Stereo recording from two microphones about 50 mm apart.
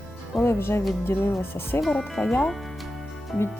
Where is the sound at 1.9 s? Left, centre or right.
Centre.